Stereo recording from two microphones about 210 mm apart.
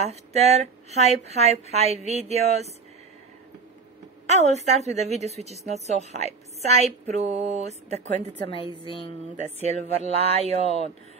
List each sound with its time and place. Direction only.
0.0 s a woman's voice: 30° right (ahead or behind)
4.3 s a woman's voice: 30° right (ahead or behind)
8.5 s a woman's voice: 25° left (ahead or behind)
9.4 s speech: 35° right (ahead or behind)